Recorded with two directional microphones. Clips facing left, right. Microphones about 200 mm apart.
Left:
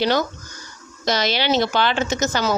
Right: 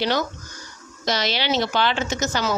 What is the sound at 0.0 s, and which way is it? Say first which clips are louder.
Speech: left 3 dB; 45° left (ahead or behind).